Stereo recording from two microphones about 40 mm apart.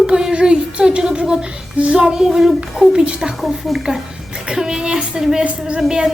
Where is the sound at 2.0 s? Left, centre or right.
Centre.